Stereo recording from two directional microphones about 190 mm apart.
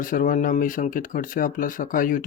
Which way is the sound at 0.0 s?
45° left (ahead or behind).